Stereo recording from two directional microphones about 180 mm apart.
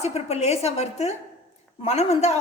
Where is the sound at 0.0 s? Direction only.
35° left (ahead or behind).